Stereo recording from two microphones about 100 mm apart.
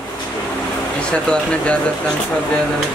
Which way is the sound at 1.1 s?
10° left (ahead or behind).